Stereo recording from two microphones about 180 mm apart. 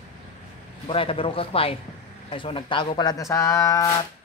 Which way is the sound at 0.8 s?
30° left (ahead or behind).